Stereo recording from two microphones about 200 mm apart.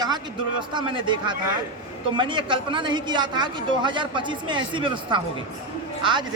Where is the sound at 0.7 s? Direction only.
25° right (ahead or behind).